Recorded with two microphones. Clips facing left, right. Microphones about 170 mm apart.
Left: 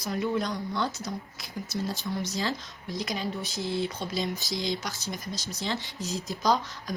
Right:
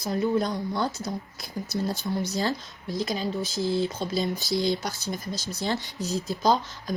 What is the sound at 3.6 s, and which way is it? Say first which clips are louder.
A woman's voice: right 4 dB; 35° right (ahead or behind).